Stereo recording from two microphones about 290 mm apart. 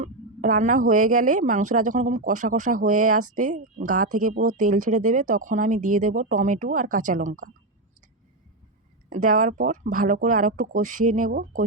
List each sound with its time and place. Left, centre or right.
0.0 s speech: right
9.0 s speech: right